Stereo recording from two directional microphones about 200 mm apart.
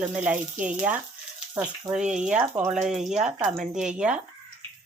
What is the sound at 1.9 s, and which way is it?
Speech, 5° right (ahead or behind).